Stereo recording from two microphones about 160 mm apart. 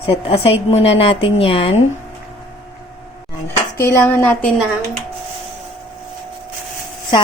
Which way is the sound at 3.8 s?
15° left (ahead or behind).